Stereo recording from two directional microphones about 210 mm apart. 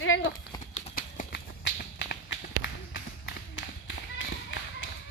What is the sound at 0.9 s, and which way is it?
Horse, 45° left (ahead or behind).